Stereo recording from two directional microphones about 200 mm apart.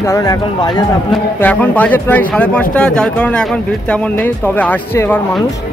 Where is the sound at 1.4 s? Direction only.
10° left (ahead or behind).